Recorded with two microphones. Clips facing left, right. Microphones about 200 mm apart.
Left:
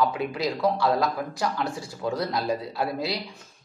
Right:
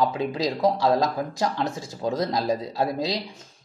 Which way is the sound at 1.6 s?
20° right (ahead or behind).